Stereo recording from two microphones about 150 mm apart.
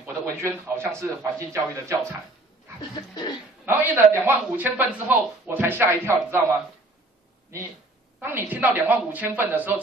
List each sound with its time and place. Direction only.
0.0 s a man's voice: 15° right (ahead or behind)
3.6 s a man's voice: 15° right (ahead or behind)
8.2 s a man's voice: 10° right (ahead or behind)